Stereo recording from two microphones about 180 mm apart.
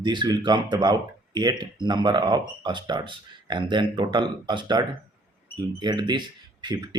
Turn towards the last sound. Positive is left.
turn(degrees=-25)  # may be behind; listen again after turning